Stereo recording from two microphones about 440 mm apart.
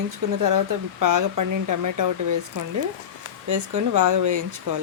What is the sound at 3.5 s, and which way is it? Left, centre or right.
Speech, right.